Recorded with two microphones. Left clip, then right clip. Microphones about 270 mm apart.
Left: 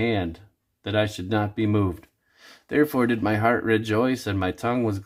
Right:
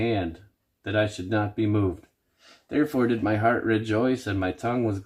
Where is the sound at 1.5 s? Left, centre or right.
Left.